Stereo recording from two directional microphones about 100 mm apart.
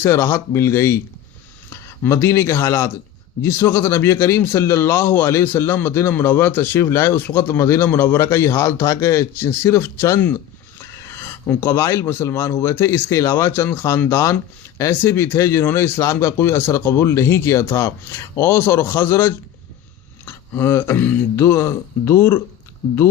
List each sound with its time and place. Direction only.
0.0 s speech: 25° left (ahead or behind)